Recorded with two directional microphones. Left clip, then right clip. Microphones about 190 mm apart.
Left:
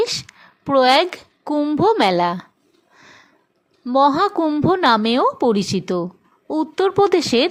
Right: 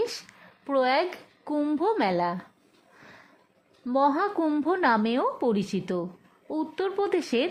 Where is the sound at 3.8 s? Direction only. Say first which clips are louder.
Left 9 dB; 20° left (ahead or behind).